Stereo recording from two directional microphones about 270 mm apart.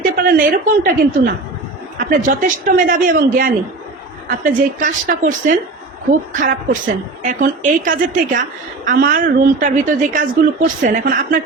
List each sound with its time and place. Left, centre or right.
0.0 s a woman's voice: right